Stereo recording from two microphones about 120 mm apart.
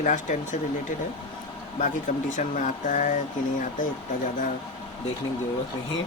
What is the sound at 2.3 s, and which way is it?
Speech, 90° left.